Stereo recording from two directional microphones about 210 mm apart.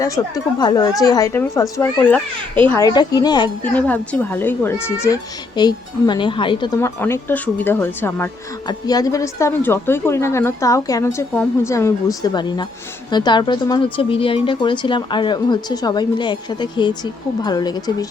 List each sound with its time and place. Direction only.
0.0 s speech: 15° left (ahead or behind)
3.6 s speech: 5° left (ahead or behind); by 6.7 s 25° left (ahead or behind)
6.7 s speech: 10° left (ahead or behind)